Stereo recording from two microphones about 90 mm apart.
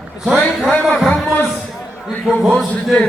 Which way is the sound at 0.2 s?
10° right (ahead or behind).